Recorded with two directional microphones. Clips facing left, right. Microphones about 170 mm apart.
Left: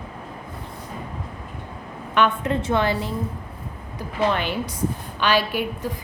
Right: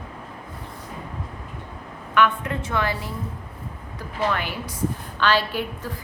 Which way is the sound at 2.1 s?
25° left (ahead or behind).